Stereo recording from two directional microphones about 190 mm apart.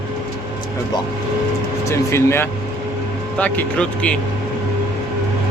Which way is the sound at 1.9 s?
15° left (ahead or behind).